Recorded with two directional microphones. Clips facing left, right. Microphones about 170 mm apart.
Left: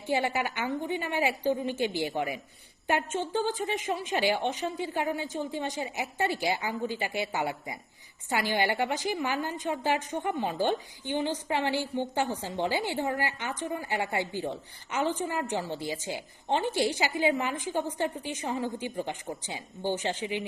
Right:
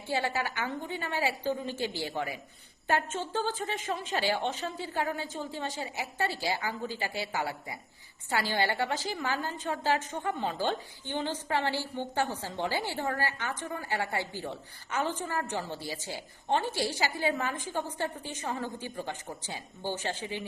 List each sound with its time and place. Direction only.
0.1 s a woman's voice: 20° left (ahead or behind)